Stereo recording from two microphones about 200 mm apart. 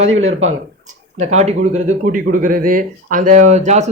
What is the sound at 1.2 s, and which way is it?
Speech, 35° right (ahead or behind).